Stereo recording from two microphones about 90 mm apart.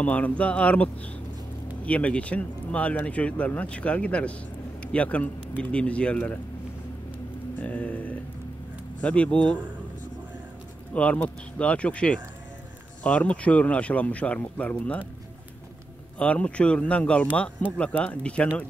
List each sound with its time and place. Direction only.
0.0 s speech: 15° left (ahead or behind)
1.9 s speech: 15° left (ahead or behind)
7.6 s speech: 15° left (ahead or behind)
10.9 s speech: 15° left (ahead or behind)
16.2 s speech: 15° left (ahead or behind)